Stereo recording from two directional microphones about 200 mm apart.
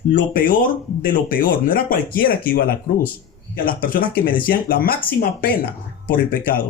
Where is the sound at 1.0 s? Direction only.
45° left (ahead or behind).